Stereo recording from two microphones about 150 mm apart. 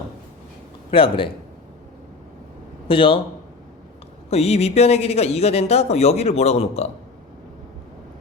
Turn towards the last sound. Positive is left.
turn(degrees=45)  # may be behind; listen again after turning